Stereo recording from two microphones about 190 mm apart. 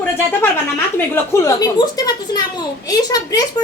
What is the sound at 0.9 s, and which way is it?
A woman's voice, 15° left (ahead or behind).